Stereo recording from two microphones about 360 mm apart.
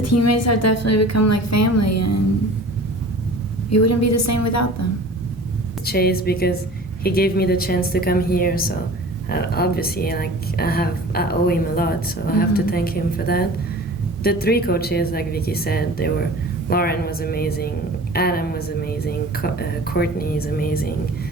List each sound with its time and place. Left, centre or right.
0.0 s a woman's voice: left
3.7 s a woman's voice: left
5.8 s speech: left